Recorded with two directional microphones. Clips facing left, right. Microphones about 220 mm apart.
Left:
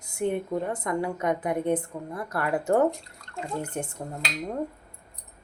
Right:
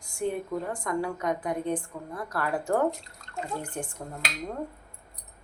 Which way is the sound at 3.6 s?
25° left (ahead or behind).